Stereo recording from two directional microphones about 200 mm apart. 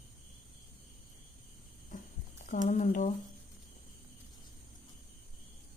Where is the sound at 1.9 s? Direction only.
40° left (ahead or behind).